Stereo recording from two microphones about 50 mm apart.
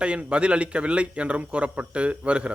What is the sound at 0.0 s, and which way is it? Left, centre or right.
Speech, right.